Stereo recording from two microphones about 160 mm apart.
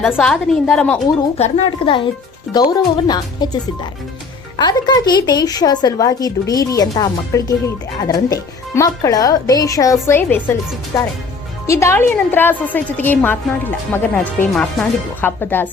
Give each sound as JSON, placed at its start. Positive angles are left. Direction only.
{"t": 0.0, "sound": "a woman's voice", "side_deg": 0}
{"t": 1.4, "sound": "a woman's voice", "side_deg": 40}